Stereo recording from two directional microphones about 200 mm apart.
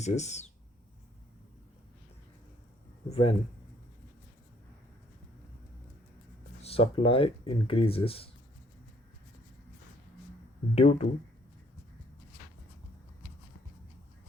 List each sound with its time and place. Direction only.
0.0 s speech: 35° left (ahead or behind)
3.1 s speech: 30° left (ahead or behind)
6.6 s speech: 30° left (ahead or behind)
10.8 s speech: 35° left (ahead or behind)